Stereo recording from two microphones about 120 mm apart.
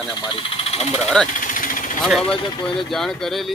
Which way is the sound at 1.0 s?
5° left (ahead or behind).